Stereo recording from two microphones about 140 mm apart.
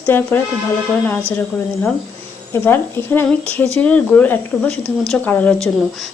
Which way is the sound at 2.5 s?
15° left (ahead or behind).